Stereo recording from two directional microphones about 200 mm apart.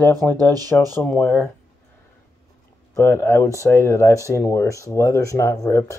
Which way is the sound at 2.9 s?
15° left (ahead or behind).